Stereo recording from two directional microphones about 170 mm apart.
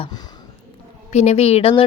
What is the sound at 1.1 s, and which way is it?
Speech, 40° left (ahead or behind).